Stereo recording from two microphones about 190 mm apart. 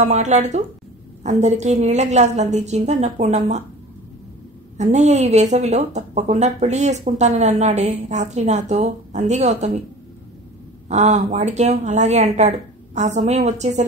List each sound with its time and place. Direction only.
0.0 s speech: 35° right (ahead or behind)
4.7 s speech: 35° right (ahead or behind)
10.9 s speech: 35° right (ahead or behind)